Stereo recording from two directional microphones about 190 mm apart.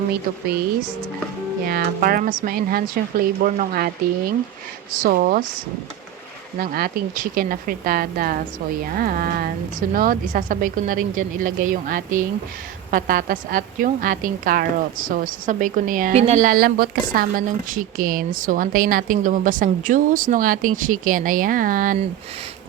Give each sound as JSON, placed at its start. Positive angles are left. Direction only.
{"t": 1.6, "sound": "a woman's voice", "side_deg": -50}
{"t": 6.6, "sound": "a woman's voice", "side_deg": -50}